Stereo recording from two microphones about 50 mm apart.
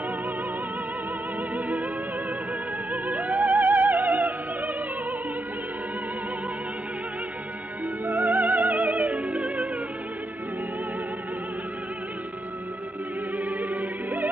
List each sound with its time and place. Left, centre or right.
1.5 s music: right
2.9 s music: right
8.0 s music: right
13.4 s music: right